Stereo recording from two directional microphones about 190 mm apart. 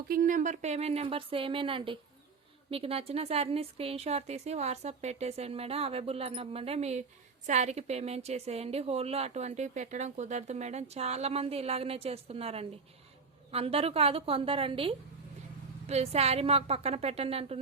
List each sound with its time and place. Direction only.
0.1 s a woman's voice: 45° right (ahead or behind)